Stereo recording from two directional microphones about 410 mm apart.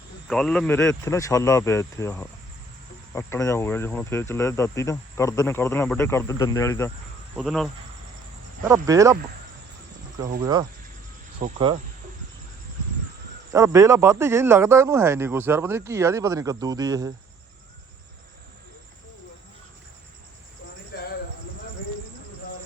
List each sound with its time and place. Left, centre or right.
0.3 s speech: centre
10.4 s speech: centre
13.5 s speech: centre
20.9 s cricket: left